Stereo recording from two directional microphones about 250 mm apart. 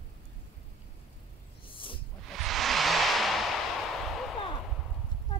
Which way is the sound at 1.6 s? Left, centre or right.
Left.